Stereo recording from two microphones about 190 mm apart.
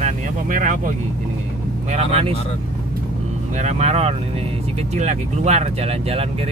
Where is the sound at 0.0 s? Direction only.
45° right (ahead or behind).